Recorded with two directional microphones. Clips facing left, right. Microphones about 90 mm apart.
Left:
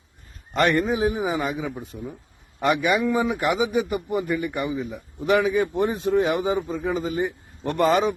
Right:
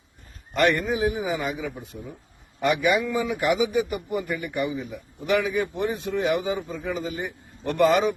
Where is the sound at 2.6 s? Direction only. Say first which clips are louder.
Left 1 dB; 30° left (ahead or behind).